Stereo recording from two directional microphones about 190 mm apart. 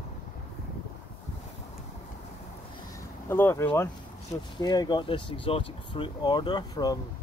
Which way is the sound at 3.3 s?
15° left (ahead or behind).